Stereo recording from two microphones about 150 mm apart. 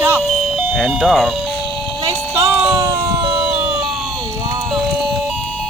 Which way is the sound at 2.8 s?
25° right (ahead or behind).